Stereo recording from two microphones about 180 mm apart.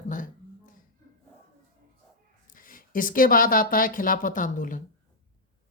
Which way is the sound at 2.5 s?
50° left (ahead or behind).